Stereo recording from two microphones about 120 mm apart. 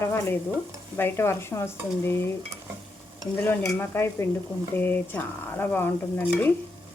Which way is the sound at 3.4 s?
20° left (ahead or behind).